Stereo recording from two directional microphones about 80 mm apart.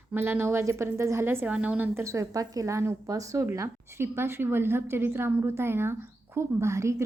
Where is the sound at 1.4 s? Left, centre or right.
Centre.